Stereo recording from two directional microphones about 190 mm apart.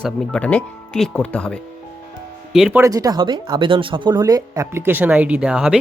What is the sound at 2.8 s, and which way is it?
Speech, 20° right (ahead or behind).